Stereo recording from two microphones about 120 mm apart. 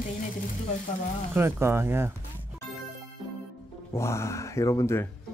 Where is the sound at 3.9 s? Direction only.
25° left (ahead or behind).